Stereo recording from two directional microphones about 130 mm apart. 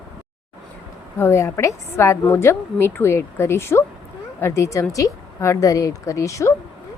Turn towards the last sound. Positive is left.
turn(degrees=25)  # may be behind; listen again after turning